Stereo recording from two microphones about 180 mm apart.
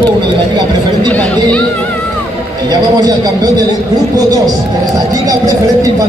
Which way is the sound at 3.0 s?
20° right (ahead or behind).